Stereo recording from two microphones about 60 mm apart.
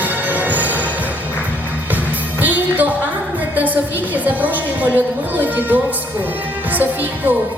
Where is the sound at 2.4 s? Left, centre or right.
Right.